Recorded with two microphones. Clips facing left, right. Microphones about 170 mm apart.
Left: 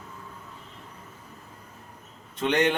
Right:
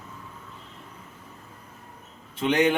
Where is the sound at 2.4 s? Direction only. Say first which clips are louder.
Right 2 dB; 10° right (ahead or behind).